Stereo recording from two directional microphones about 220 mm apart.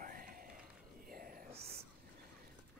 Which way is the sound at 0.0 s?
40° right (ahead or behind).